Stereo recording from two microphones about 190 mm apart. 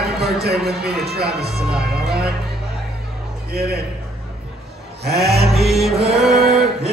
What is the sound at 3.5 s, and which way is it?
Speech, 55° right (ahead or behind).